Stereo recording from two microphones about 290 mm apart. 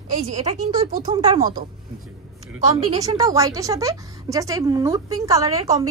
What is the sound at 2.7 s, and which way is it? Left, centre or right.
A woman's voice, centre.